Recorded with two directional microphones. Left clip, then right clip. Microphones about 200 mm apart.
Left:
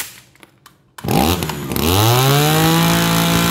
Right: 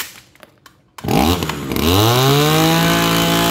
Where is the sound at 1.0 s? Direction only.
Centre (ahead or behind).